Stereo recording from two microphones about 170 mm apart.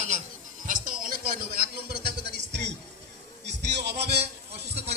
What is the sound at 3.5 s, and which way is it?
Music, 85° right.